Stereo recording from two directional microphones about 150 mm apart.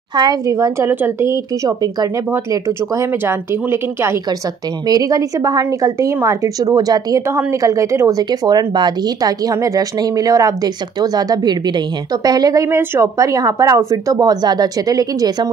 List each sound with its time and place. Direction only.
0.1 s a woman's voice: 25° right (ahead or behind)